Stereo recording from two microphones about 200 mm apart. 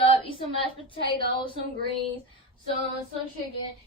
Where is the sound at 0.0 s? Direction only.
30° left (ahead or behind).